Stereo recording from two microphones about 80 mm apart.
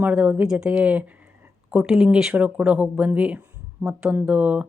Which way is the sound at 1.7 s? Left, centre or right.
Centre.